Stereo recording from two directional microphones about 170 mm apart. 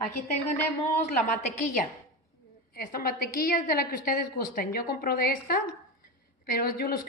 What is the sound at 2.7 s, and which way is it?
A woman's voice, 55° left (ahead or behind).